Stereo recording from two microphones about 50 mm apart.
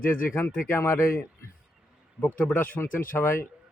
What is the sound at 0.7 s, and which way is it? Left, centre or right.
Speech, left.